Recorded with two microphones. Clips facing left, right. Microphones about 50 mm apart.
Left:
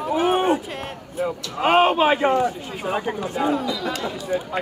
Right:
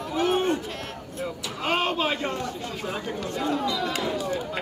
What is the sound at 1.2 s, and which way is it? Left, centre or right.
A man's voice, left.